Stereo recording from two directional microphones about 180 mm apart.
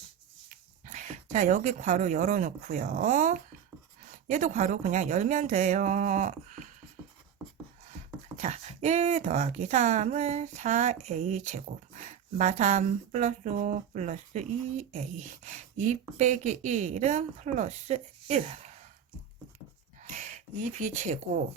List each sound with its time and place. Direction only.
0.4 s speech: 45° right (ahead or behind)
8.4 s speech: 40° right (ahead or behind)
20.1 s speech: 40° right (ahead or behind)